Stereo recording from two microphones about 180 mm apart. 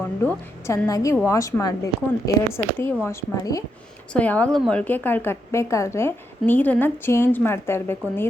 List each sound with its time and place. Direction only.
0.0 s a woman's voice: 10° left (ahead or behind)
4.1 s a woman's voice: 10° left (ahead or behind)